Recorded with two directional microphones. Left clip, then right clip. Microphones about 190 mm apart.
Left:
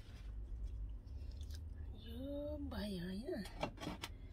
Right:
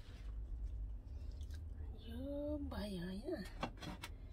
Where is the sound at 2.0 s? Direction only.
30° right (ahead or behind).